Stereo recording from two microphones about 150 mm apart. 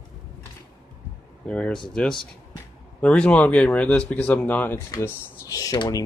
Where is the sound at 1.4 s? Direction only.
5° left (ahead or behind).